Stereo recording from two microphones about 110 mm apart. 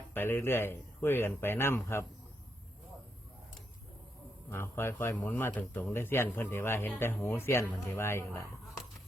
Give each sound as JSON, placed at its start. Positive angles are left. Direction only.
{"t": 0.1, "sound": "speech", "side_deg": 20}
{"t": 4.4, "sound": "speech", "side_deg": 20}